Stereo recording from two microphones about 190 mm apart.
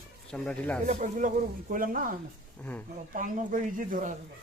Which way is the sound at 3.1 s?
45° right (ahead or behind).